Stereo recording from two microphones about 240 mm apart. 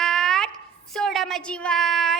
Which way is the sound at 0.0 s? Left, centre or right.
Centre.